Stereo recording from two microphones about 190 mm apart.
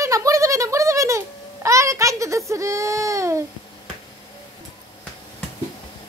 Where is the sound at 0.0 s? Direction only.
15° right (ahead or behind).